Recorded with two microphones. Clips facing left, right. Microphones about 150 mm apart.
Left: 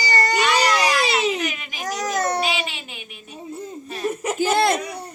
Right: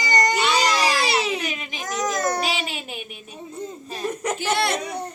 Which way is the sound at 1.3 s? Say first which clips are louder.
Left 1 dB; 25° right (ahead or behind).